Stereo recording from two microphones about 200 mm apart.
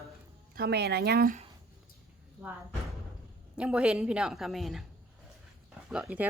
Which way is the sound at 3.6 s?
5° right (ahead or behind).